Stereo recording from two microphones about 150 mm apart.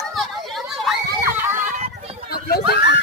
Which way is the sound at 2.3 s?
90° left.